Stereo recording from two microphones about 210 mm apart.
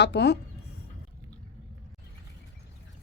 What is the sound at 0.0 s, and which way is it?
Speech, 55° left (ahead or behind).